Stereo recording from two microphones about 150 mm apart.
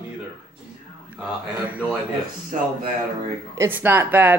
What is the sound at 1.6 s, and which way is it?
Throat clearing, 10° right (ahead or behind).